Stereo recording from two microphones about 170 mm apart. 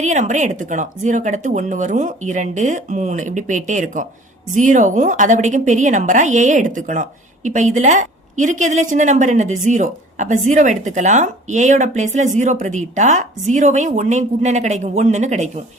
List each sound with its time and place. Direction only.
0.0 s a woman's voice: 45° right (ahead or behind)